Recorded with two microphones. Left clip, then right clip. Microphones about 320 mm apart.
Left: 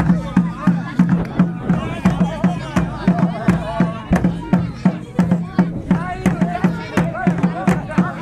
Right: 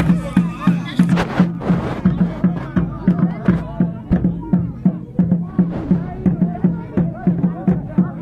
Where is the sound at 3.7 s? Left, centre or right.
Left.